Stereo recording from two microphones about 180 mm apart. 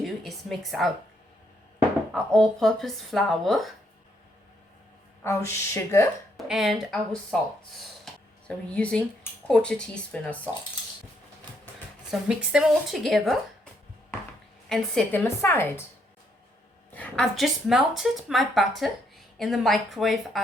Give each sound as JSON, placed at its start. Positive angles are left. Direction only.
{"t": 0.0, "sound": "a woman's voice", "side_deg": 0}
{"t": 2.1, "sound": "a woman's voice", "side_deg": 0}
{"t": 5.2, "sound": "a woman's voice", "side_deg": 15}
{"t": 6.3, "sound": "a woman's voice", "side_deg": 0}
{"t": 7.8, "sound": "a sound", "side_deg": 5}
{"t": 9.5, "sound": "a woman's voice", "side_deg": 5}
{"t": 12.1, "sound": "a woman's voice", "side_deg": -5}
{"t": 14.7, "sound": "a woman's voice", "side_deg": 5}
{"t": 16.9, "sound": "a woman's voice", "side_deg": 5}